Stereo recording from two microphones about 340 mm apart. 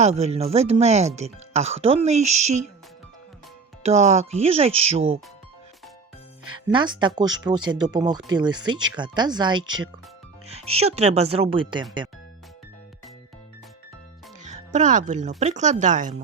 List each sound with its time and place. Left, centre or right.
0.0 s speech: centre
3.8 s speech: centre
6.7 s speech: centre
14.4 s speech: right